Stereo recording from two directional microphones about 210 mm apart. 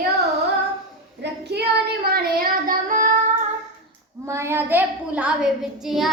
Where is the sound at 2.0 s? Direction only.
45° right (ahead or behind).